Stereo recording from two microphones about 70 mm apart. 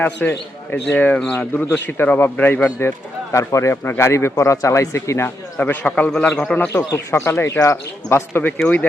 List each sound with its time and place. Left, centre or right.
0.0 s a man's voice: left
5.5 s a man's voice: left
6.7 s a man's voice: left